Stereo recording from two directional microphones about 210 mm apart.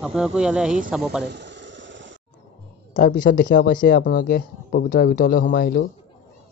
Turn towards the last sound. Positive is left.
turn(degrees=45)  # may be behind; listen again after turning